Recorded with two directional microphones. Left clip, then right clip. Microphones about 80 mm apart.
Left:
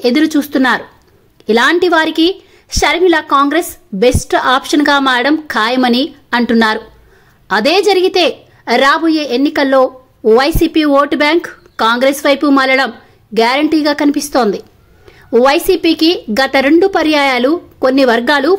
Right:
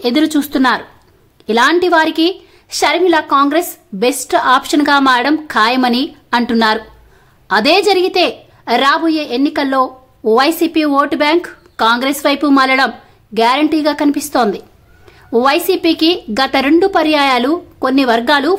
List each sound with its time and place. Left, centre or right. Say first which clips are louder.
0.0 s a woman's voice: left 2 dB; left